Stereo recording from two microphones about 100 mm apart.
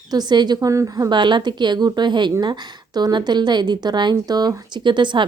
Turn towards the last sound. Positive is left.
turn(degrees=-50)  # may be behind; listen again after turning